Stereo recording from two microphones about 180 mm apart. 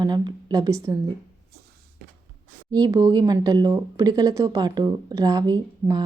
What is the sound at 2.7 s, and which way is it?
Speech, 25° right (ahead or behind).